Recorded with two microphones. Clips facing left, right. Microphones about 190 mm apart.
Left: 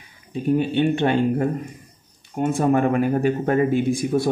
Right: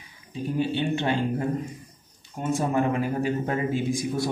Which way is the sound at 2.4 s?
60° left (ahead or behind).